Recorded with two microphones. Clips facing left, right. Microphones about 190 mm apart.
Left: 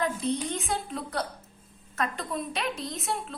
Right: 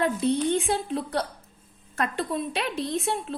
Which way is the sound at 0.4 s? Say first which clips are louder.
Right 7 dB; 30° right (ahead or behind).